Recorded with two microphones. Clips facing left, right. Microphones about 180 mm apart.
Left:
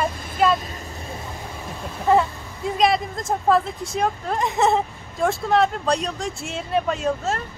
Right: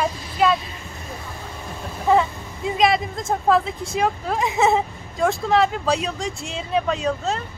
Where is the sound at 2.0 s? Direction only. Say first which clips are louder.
Even; centre (ahead or behind).